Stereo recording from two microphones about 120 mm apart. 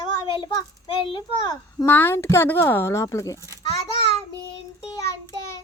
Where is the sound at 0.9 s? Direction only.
50° left (ahead or behind).